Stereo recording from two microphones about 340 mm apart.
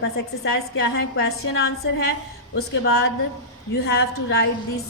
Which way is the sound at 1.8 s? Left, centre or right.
Left.